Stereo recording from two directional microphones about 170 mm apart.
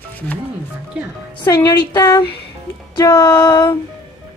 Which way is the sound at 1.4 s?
25° left (ahead or behind).